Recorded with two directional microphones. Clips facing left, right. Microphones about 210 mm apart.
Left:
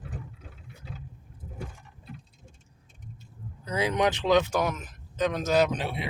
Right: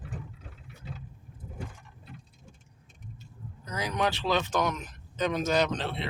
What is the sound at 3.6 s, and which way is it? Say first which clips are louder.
Speech: left 4 dB; 25° left (ahead or behind).